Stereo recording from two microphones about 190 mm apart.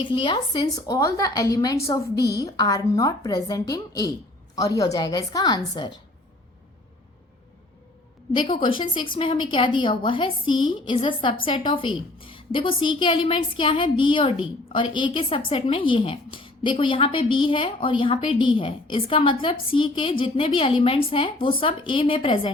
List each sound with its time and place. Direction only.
0.0 s a woman's voice: 25° left (ahead or behind)
8.3 s a woman's voice: 25° left (ahead or behind)